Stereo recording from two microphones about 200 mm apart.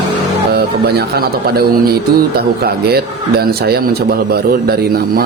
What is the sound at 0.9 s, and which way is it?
A man's voice, 50° right (ahead or behind).